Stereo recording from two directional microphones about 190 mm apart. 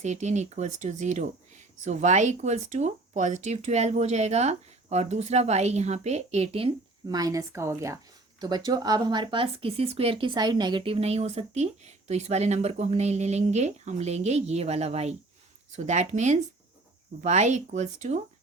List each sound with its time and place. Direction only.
0.0 s speech: 40° right (ahead or behind)